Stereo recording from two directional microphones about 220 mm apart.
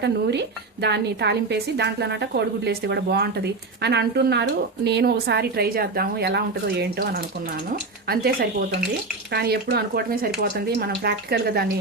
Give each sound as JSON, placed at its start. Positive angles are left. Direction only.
{"t": 0.0, "sound": "speech", "side_deg": -50}